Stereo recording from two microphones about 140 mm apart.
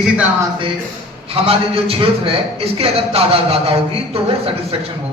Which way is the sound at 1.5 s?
40° right (ahead or behind).